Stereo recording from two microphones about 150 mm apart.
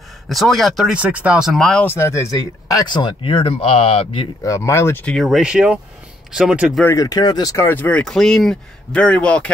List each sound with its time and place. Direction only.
0.3 s speech: centre (ahead or behind)
1.9 s speech: 20° left (ahead or behind); by 4.3 s 35° left (ahead or behind)
4.4 s speech: 20° left (ahead or behind)
5.1 s speech: centre (ahead or behind)
6.8 s speech: 20° left (ahead or behind)